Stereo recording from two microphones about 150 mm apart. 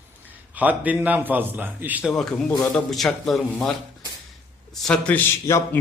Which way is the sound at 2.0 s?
5° left (ahead or behind).